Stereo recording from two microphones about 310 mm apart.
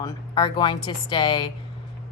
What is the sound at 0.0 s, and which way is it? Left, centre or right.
A man's voice, centre.